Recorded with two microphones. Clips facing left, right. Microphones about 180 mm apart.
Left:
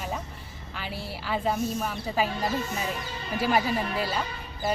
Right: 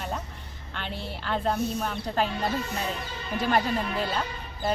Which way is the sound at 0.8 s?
5° left (ahead or behind).